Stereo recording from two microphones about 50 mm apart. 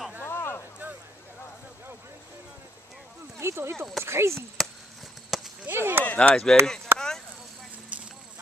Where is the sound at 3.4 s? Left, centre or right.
Right.